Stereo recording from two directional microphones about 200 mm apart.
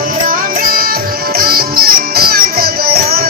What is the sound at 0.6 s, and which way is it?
Music, 45° right (ahead or behind).